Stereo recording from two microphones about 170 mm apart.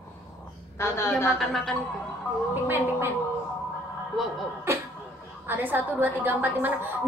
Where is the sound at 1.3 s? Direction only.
Centre (ahead or behind).